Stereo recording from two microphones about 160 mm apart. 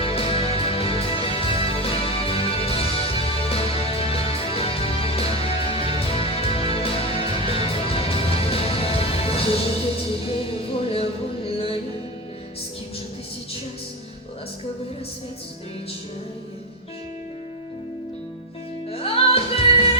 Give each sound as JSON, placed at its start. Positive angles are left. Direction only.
{"t": 0.0, "sound": "music", "side_deg": 35}
{"t": 18.9, "sound": "music", "side_deg": 35}